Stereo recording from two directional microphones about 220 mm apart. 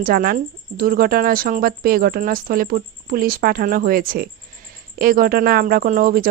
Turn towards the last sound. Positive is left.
turn(degrees=-40)  # may be behind; listen again after turning